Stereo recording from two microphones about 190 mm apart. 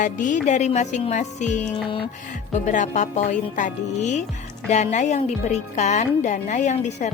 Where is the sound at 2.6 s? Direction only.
40° left (ahead or behind).